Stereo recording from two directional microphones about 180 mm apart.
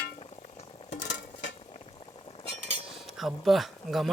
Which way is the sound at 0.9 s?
80° left.